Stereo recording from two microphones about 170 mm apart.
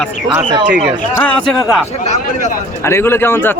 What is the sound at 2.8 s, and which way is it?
Speech, 15° left (ahead or behind).